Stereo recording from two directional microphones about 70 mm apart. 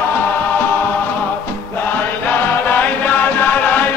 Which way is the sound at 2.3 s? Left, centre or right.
Left.